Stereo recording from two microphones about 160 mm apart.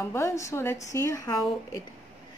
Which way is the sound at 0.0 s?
15° left (ahead or behind).